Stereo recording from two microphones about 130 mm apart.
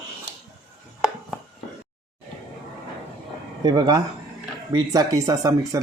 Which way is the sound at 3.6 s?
35° right (ahead or behind).